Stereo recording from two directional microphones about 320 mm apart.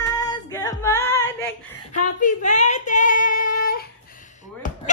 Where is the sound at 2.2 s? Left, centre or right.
Left.